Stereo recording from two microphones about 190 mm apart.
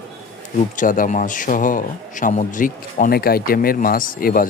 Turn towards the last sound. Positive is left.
turn(degrees=50)  # may be behind; listen again after turning